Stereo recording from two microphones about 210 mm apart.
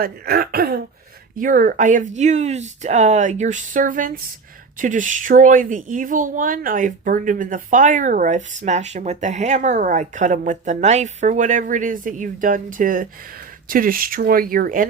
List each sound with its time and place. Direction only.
0.0 s speech: 45° right (ahead or behind)